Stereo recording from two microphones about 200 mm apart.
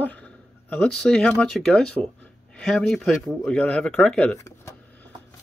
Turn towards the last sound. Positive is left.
turn(degrees=15)  # may be behind; listen again after turning